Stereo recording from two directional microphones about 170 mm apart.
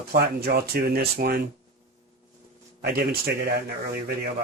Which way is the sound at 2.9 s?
65° right (ahead or behind).